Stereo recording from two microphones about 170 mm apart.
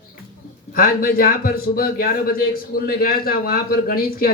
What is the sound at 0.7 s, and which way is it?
A man's voice, 60° left (ahead or behind).